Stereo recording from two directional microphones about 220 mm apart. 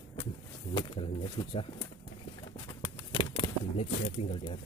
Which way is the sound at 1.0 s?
25° left (ahead or behind).